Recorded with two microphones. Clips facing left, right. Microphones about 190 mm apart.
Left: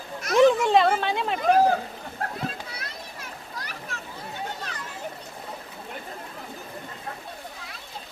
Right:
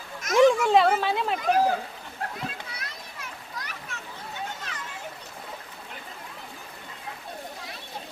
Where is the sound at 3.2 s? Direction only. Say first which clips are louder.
Left 1 dB; 35° left (ahead or behind).